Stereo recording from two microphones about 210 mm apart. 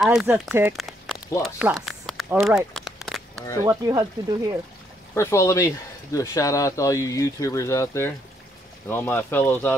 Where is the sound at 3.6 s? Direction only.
20° right (ahead or behind).